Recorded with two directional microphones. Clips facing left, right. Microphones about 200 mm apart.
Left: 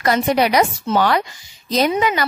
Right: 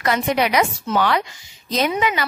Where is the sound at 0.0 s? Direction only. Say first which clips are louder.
Left 3 dB; 35° left (ahead or behind).